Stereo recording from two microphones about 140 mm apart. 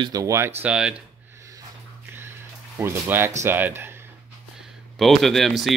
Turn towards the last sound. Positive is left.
turn(degrees=0)  # may be behind; listen again after turning